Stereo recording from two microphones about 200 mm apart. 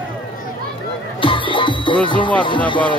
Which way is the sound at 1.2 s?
25° left (ahead or behind).